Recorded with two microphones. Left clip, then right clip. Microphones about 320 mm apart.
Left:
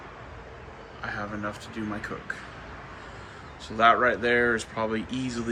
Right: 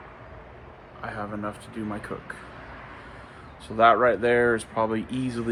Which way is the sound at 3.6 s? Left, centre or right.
Centre.